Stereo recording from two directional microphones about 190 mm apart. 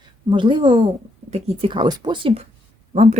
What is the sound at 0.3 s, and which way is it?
A woman's voice, 25° right (ahead or behind).